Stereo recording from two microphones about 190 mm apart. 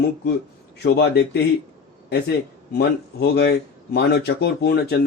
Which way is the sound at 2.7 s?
60° left (ahead or behind).